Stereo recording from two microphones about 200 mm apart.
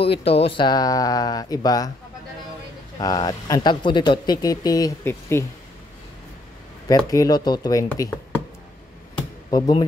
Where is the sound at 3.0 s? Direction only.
20° left (ahead or behind).